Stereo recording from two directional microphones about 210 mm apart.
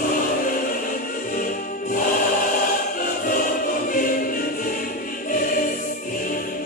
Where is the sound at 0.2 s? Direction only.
40° left (ahead or behind).